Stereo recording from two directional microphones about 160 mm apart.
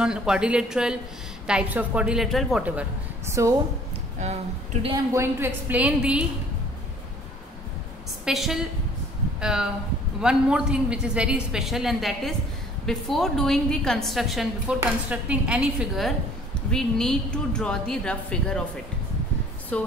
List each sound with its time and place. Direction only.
0.0 s a woman's voice: 5° right (ahead or behind)
3.4 s a woman's voice: 20° right (ahead or behind)
4.9 s a woman's voice: 15° right (ahead or behind)
8.3 s a woman's voice: centre (ahead or behind)
19.7 s music: 5° left (ahead or behind)